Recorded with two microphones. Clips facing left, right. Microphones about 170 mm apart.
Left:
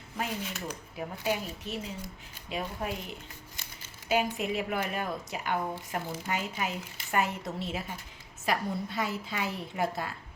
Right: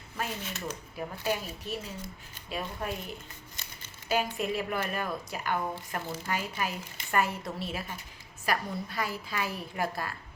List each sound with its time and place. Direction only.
0.2 s speech: 15° left (ahead or behind)
4.1 s a woman's voice: 20° left (ahead or behind)